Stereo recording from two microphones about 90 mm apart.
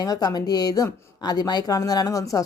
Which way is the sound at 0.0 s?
45° left (ahead or behind).